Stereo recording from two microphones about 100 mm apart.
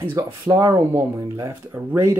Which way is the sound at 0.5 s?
40° right (ahead or behind).